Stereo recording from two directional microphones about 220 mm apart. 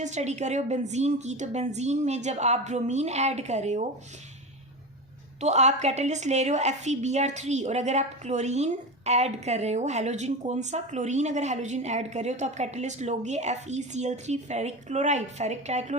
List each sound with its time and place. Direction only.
0.0 s a woman's voice: 30° right (ahead or behind)
5.4 s a woman's voice: 30° right (ahead or behind)